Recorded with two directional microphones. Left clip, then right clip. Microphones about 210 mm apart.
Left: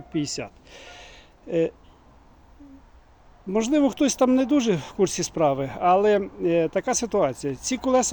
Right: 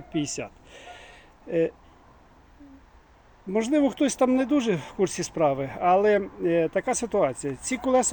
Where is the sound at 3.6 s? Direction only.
10° left (ahead or behind).